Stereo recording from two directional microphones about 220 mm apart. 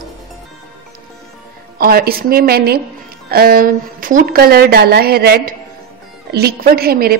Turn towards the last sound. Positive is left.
turn(degrees=-45)  # may be behind; listen again after turning